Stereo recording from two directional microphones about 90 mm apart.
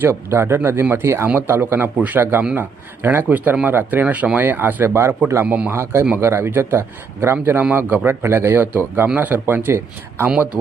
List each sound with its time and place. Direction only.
0.0 s a man's voice: 30° right (ahead or behind)
5.7 s speech: 30° right (ahead or behind)
10.2 s a man's voice: 10° right (ahead or behind)